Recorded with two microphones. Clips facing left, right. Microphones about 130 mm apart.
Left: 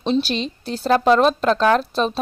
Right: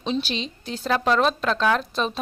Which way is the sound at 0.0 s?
40° left (ahead or behind).